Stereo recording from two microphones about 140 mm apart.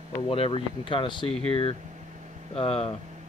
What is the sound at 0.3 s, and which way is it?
Speech, 40° left (ahead or behind).